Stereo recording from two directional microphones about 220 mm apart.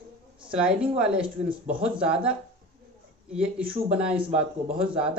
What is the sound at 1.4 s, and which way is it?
Speech, 25° right (ahead or behind).